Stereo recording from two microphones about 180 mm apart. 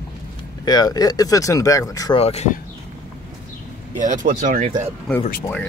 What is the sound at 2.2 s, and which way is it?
Speech, 35° left (ahead or behind).